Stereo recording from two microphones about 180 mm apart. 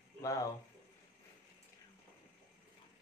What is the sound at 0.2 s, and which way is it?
Speech, 15° left (ahead or behind).